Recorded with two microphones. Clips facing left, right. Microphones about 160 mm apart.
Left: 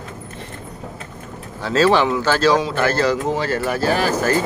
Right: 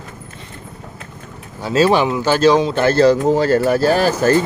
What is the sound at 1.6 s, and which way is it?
Speech, 15° right (ahead or behind).